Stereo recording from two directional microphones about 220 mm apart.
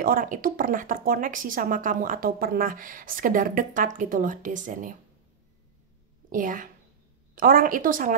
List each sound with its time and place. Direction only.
0.0 s speech: 40° right (ahead or behind)
6.3 s speech: 35° right (ahead or behind)